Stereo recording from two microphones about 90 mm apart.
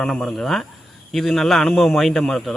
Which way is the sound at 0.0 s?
5° left (ahead or behind).